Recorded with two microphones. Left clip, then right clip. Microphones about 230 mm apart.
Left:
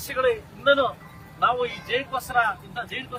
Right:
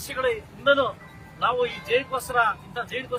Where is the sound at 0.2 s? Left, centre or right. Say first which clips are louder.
Left 3 dB; centre.